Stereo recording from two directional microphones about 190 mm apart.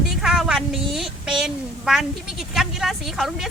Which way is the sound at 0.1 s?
5° right (ahead or behind).